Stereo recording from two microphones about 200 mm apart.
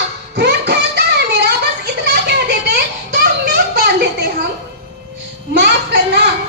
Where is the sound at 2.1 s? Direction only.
55° right (ahead or behind).